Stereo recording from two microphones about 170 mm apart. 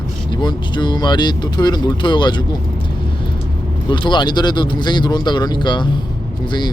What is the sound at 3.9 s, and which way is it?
Speech, 25° left (ahead or behind).